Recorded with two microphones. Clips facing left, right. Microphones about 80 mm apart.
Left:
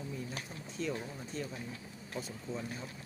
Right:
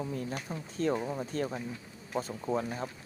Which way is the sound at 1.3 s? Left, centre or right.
Right.